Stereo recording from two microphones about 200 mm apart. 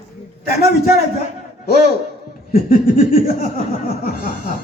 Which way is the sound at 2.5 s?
45° left (ahead or behind).